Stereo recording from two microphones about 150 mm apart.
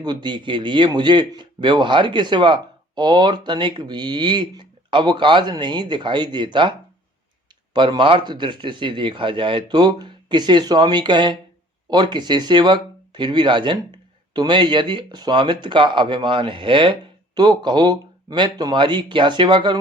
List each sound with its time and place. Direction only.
0.0 s speech: 30° right (ahead or behind)